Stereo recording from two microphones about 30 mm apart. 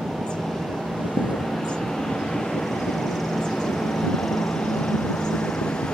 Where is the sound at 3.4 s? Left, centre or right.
Left.